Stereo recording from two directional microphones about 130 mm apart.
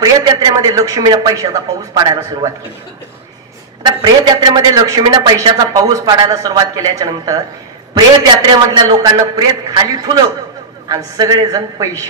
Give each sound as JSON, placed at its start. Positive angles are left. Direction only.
{"t": 0.0, "sound": "a man's voice", "side_deg": -30}
{"t": 3.8, "sound": "a man's voice", "side_deg": -35}
{"t": 8.5, "sound": "a man's voice", "side_deg": -35}